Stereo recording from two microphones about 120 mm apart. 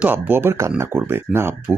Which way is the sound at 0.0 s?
15° right (ahead or behind).